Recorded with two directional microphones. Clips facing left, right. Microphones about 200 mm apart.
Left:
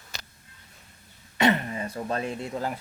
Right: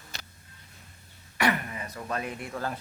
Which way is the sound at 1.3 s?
25° left (ahead or behind).